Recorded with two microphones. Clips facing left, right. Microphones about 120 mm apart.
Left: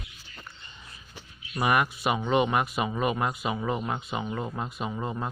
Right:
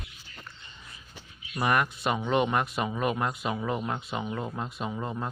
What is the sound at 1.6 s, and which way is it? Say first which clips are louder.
Speech: left 1 dB; 5° left (ahead or behind).